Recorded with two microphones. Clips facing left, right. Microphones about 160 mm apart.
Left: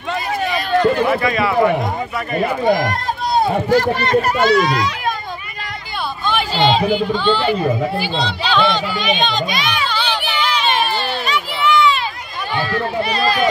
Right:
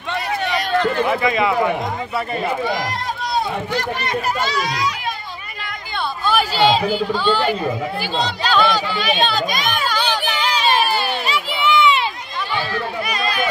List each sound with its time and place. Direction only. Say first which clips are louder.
1.1 s a man's voice: left 1 dB; 20° right (ahead or behind)
2.6 s speech: left 6 dB; 45° left (ahead or behind)
6.2 s a sound: even; 5° right (ahead or behind)
7.1 s speech: left 2 dB; 10° right (ahead or behind)
9.5 s speech: left 1 dB; 45° right (ahead or behind)
10.2 s a sound: even; 40° right (ahead or behind)
13.1 s speech: left 5 dB; 35° left (ahead or behind)